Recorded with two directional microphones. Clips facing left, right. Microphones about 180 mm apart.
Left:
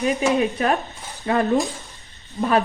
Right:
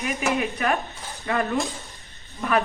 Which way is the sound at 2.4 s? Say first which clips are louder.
Left 4 dB; 30° left (ahead or behind).